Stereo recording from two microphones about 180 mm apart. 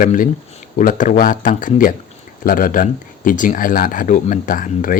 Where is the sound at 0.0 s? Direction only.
50° left (ahead or behind).